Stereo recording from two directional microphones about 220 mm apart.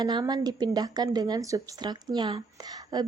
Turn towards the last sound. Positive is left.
turn(degrees=-20)  # may be behind; listen again after turning